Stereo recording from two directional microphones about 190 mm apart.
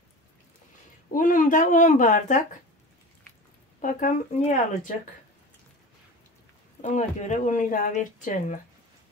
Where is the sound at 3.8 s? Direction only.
45° left (ahead or behind).